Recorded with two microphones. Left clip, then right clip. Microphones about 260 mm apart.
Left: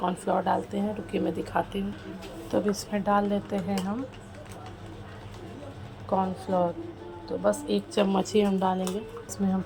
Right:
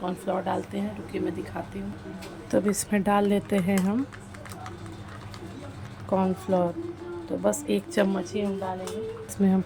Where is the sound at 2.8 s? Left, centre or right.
Centre.